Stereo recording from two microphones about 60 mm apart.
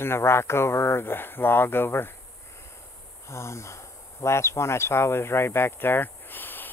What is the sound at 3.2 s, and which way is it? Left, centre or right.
Speech, left.